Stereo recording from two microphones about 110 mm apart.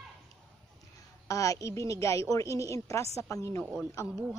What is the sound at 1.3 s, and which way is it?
A woman's voice, 30° left (ahead or behind).